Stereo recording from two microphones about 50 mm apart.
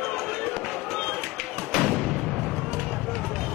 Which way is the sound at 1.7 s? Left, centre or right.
Centre.